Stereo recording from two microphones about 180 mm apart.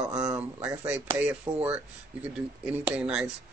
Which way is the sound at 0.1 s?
20° right (ahead or behind).